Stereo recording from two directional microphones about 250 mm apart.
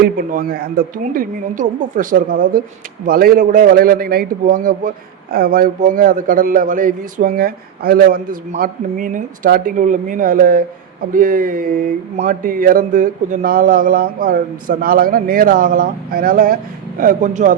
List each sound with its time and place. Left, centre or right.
0.0 s a man's voice: right